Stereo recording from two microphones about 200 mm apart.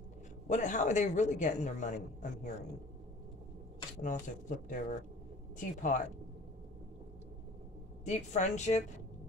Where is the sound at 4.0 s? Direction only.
40° left (ahead or behind).